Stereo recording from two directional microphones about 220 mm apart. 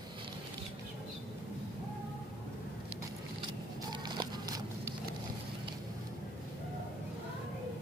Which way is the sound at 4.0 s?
20° right (ahead or behind).